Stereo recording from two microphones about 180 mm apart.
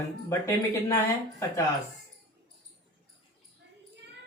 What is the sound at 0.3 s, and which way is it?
Speech, 15° left (ahead or behind).